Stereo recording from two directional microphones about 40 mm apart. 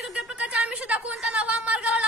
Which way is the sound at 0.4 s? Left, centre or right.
Right.